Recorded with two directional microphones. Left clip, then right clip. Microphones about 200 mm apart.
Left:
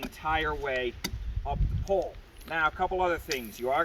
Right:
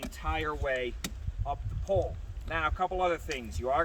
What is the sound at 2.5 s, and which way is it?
Speech, 20° right (ahead or behind).